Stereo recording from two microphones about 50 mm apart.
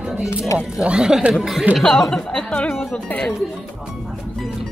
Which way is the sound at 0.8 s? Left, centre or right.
Centre.